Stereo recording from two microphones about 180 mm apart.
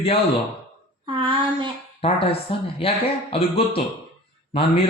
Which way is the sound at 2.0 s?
30° left (ahead or behind).